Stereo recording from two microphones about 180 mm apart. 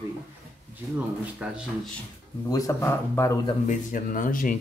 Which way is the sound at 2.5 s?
20° left (ahead or behind).